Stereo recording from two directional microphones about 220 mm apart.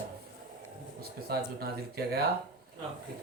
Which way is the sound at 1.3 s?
45° right (ahead or behind).